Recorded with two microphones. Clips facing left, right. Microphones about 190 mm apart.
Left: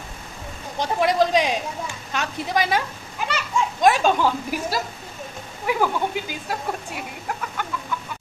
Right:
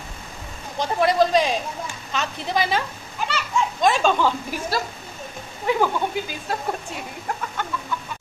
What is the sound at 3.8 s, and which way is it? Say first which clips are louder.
Speech: left 1 dB; 10° left (ahead or behind).